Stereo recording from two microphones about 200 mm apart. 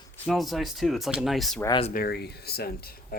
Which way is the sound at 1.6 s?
25° left (ahead or behind).